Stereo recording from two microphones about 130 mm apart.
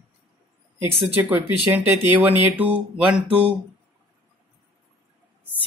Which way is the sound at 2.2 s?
15° right (ahead or behind).